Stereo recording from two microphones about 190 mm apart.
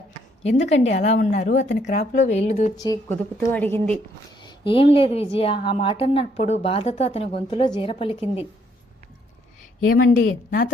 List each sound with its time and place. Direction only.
0.6 s a woman's voice: 35° left (ahead or behind)
2.7 s a woman's voice: 20° left (ahead or behind)
4.4 s a woman's voice: 25° left (ahead or behind)
8.1 s a woman's voice: 10° right (ahead or behind)
9.8 s speech: 50° left (ahead or behind)